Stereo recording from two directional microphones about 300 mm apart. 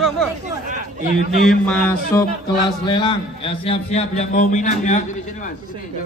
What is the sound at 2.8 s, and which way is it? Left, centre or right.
A man's voice, centre.